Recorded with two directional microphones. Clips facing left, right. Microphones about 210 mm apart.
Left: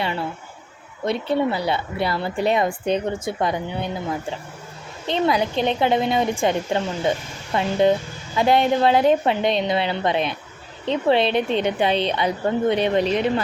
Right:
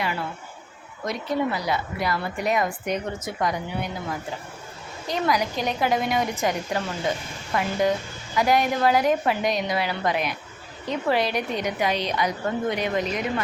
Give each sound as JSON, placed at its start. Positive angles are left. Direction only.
{"t": 0.0, "sound": "a woman's voice", "side_deg": 25}
{"t": 5.0, "sound": "a woman's voice", "side_deg": 25}